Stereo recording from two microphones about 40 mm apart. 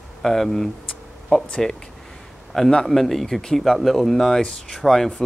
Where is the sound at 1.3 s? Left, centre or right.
Left.